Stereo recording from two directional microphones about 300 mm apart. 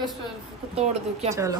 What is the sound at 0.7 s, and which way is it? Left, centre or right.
Speech, right.